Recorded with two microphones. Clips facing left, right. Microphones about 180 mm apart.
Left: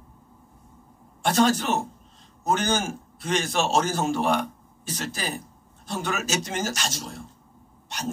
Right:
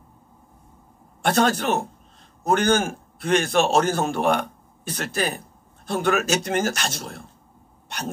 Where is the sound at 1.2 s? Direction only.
60° right (ahead or behind).